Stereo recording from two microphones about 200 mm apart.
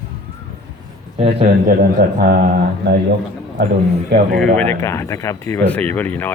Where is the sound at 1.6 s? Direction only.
45° right (ahead or behind).